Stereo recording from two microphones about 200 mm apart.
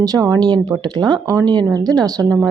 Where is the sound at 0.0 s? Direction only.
20° right (ahead or behind).